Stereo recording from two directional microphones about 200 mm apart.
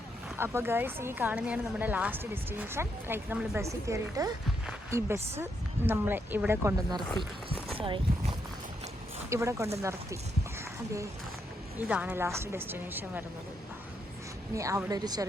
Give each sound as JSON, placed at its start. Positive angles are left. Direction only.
{"t": 0.3, "sound": "a woman's voice", "side_deg": -10}
{"t": 7.8, "sound": "speech", "side_deg": -25}
{"t": 9.3, "sound": "a woman's voice", "side_deg": -15}
{"t": 11.8, "sound": "a woman's voice", "side_deg": -10}
{"t": 14.5, "sound": "a woman's voice", "side_deg": -15}